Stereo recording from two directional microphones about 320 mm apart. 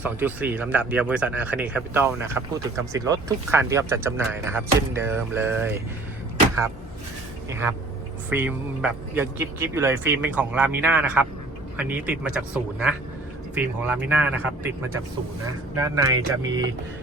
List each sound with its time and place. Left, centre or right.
0.0 s speech: centre
7.5 s speech: centre
15.8 s speech: centre